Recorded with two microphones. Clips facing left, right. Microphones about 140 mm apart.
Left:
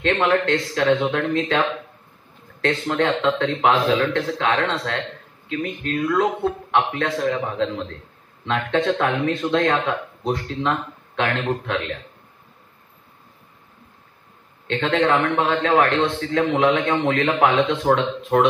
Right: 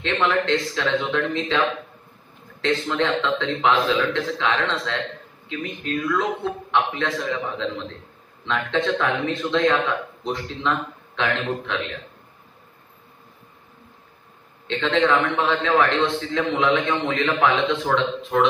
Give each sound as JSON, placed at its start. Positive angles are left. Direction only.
{"t": 0.0, "sound": "speech", "side_deg": 50}
{"t": 2.6, "sound": "speech", "side_deg": 50}
{"t": 14.7, "sound": "speech", "side_deg": 45}